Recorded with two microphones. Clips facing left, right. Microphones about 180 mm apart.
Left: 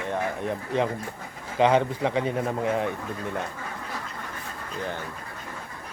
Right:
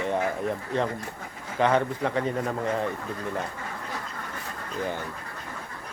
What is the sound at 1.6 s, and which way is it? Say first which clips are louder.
Speech: left 2 dB; 15° left (ahead or behind).